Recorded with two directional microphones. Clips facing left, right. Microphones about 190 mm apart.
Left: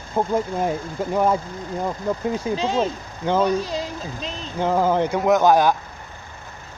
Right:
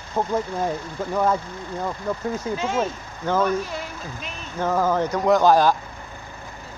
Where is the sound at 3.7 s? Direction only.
90° left.